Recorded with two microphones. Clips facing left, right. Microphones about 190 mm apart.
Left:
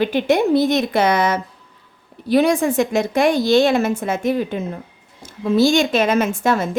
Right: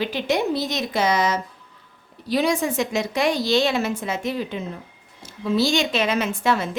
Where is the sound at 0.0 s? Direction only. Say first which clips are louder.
Left 6 dB; 55° left (ahead or behind).